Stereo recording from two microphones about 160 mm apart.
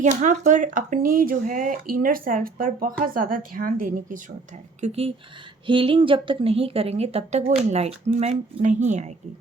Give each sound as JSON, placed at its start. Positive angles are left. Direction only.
{"t": 0.0, "sound": "speech", "side_deg": -50}
{"t": 4.8, "sound": "a woman's voice", "side_deg": -40}